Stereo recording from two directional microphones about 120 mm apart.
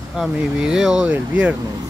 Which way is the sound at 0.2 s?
5° right (ahead or behind).